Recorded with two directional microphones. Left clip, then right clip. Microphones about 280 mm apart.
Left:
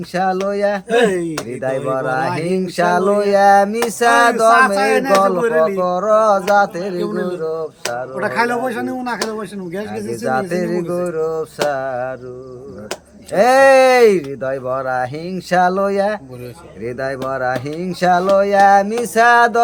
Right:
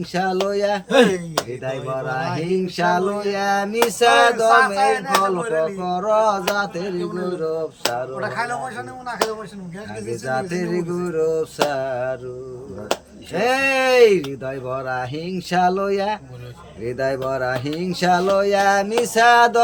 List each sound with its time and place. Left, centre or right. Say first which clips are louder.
0.1 s speech: left 3 dB; centre
2.0 s speech: left 6 dB; centre
4.5 s speech: left 3 dB; left
5.8 s speech: left 4 dB; centre
7.0 s speech: left 5 dB; left
7.3 s speech: left 2 dB; centre
8.2 s speech: left 7 dB; left
10.2 s speech: left 5 dB; centre
13.3 s speech: left 9 dB; centre